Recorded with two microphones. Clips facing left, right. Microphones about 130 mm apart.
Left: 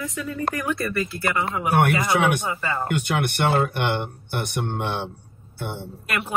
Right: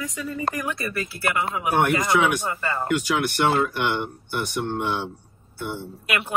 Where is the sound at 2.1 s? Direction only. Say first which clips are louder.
Right 1 dB; 60° left (ahead or behind).